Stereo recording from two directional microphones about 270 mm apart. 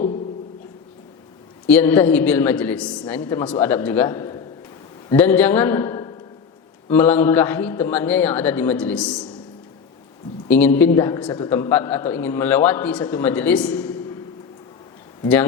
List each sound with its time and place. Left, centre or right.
1.6 s a man's voice: centre
10.5 s a man's voice: centre
15.2 s speech: centre